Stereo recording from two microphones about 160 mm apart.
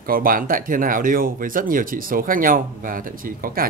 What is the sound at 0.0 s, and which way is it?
Speech, 65° right (ahead or behind).